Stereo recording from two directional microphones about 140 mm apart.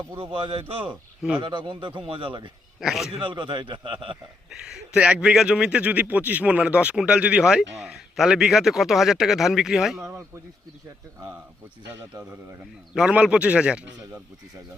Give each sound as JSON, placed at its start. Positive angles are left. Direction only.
{"t": 0.2, "sound": "a man's voice", "side_deg": -40}
{"t": 0.9, "sound": "speech", "side_deg": 0}
{"t": 1.4, "sound": "a man's voice", "side_deg": -35}
{"t": 2.8, "sound": "speech", "side_deg": 0}
{"t": 3.1, "sound": "a man's voice", "side_deg": -35}
{"t": 4.4, "sound": "speech", "side_deg": -5}
{"t": 10.0, "sound": "a man's voice", "side_deg": -20}
{"t": 12.9, "sound": "a man's voice", "side_deg": -5}